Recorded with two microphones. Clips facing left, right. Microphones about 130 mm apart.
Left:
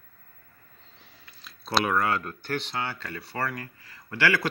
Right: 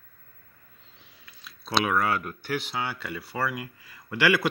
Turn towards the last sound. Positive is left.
turn(degrees=-15)  # may be behind; listen again after turning